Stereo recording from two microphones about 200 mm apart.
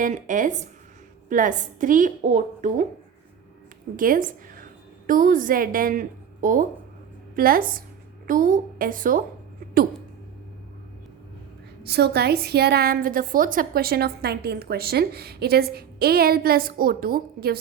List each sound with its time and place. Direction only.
0.0 s a woman's voice: 40° right (ahead or behind)
3.9 s a woman's voice: 45° right (ahead or behind)
11.9 s a woman's voice: 55° right (ahead or behind)